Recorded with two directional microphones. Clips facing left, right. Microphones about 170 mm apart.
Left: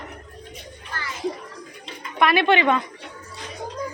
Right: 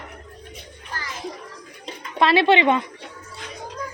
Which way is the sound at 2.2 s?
25° right (ahead or behind).